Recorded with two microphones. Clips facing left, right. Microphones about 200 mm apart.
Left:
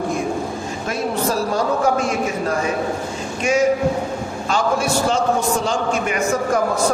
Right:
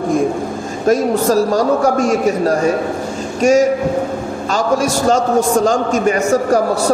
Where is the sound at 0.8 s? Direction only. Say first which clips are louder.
Right 9 dB; 40° right (ahead or behind).